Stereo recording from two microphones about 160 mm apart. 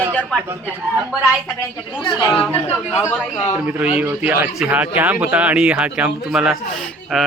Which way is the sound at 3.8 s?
10° right (ahead or behind).